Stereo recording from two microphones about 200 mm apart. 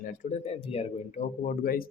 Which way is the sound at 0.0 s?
40° left (ahead or behind).